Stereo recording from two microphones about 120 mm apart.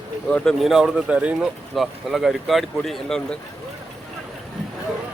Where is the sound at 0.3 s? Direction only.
10° left (ahead or behind).